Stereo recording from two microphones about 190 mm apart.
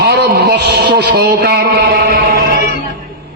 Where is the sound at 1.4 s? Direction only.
55° right (ahead or behind).